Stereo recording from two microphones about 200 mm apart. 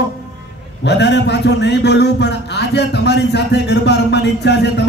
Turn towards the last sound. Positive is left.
turn(degrees=60)  # may be behind; listen again after turning